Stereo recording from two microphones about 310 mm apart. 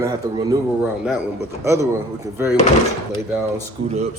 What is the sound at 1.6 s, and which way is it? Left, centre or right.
Speech, centre.